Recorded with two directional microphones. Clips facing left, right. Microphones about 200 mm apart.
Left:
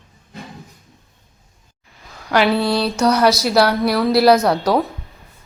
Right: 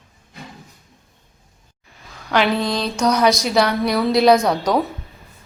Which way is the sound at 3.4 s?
5° left (ahead or behind).